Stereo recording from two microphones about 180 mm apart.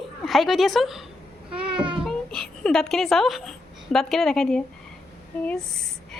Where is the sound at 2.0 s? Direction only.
5° left (ahead or behind).